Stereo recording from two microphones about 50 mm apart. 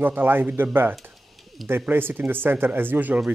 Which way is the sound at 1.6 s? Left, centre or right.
Right.